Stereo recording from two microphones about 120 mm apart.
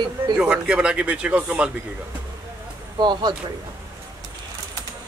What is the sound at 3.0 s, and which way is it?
Speech, 35° right (ahead or behind).